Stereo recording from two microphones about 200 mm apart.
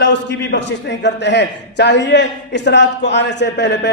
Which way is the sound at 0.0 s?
65° left (ahead or behind).